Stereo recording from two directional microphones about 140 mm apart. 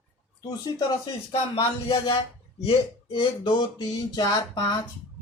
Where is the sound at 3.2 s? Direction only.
30° left (ahead or behind).